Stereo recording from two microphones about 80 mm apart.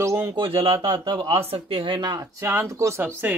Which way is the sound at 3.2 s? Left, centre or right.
Right.